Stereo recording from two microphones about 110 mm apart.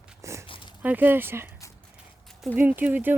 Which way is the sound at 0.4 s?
50° left (ahead or behind).